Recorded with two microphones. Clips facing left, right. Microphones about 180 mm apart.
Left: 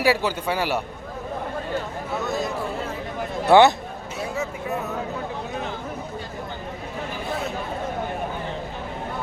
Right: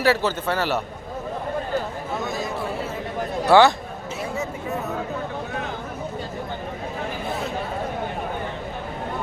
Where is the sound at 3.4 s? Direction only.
20° left (ahead or behind).